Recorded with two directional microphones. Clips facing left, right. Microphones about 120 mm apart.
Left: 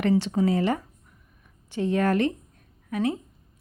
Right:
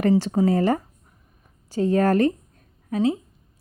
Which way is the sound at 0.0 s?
40° right (ahead or behind).